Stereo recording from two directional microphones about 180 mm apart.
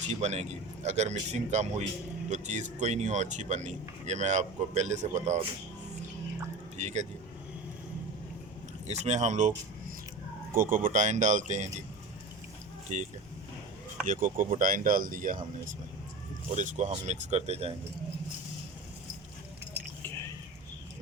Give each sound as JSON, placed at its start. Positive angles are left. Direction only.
{"t": 0.1, "sound": "speech", "side_deg": -40}
{"t": 6.7, "sound": "speech", "side_deg": -40}
{"t": 8.9, "sound": "speech", "side_deg": -40}
{"t": 10.6, "sound": "speech", "side_deg": -50}
{"t": 12.9, "sound": "speech", "side_deg": -45}
{"t": 14.1, "sound": "speech", "side_deg": -45}
{"t": 16.6, "sound": "speech", "side_deg": -45}